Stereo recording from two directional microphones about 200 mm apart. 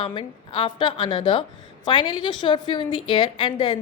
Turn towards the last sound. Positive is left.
turn(degrees=25)  # may be behind; listen again after turning